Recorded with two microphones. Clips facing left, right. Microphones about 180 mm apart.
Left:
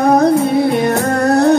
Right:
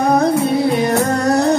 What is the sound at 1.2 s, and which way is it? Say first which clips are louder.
Music: left 5 dB; 60° left (ahead or behind).